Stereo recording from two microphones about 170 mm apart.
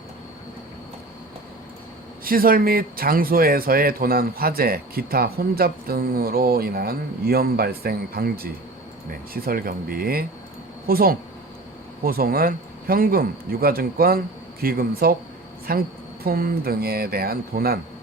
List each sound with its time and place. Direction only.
2.2 s speech: 60° right (ahead or behind)